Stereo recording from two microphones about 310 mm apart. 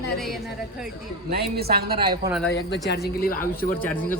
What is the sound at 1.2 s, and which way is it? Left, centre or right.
Speech, right.